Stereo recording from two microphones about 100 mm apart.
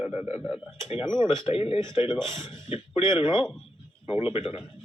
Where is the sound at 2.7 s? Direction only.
60° left (ahead or behind).